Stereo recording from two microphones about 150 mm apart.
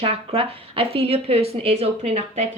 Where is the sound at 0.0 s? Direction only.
40° right (ahead or behind).